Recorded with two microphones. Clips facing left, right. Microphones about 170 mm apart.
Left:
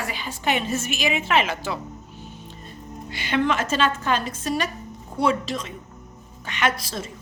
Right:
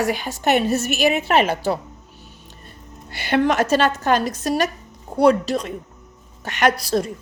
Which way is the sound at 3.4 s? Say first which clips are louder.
Right 5 dB; 40° right (ahead or behind).